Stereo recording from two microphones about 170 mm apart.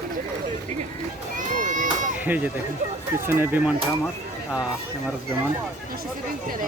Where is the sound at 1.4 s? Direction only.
50° right (ahead or behind).